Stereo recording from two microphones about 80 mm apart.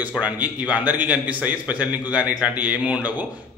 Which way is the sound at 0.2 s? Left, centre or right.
Centre.